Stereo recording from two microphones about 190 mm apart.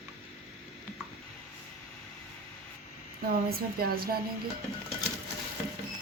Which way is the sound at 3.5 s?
50° right (ahead or behind).